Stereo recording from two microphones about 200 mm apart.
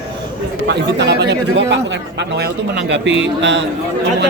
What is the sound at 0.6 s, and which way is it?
Speech, 60° right (ahead or behind).